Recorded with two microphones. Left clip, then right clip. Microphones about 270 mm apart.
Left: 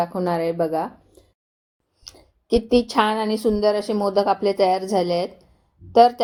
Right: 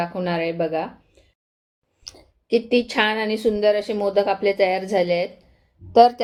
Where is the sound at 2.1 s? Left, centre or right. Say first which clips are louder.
Right 2 dB; centre.